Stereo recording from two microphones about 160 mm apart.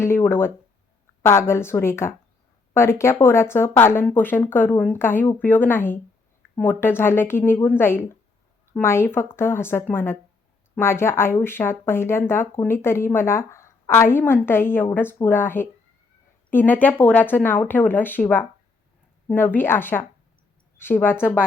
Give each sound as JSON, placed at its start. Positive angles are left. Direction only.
{"t": 0.0, "sound": "speech", "side_deg": 15}